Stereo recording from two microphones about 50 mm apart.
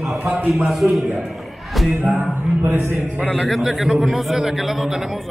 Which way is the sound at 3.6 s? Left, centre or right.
Centre.